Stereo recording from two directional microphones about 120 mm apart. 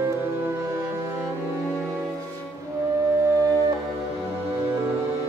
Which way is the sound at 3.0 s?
25° right (ahead or behind).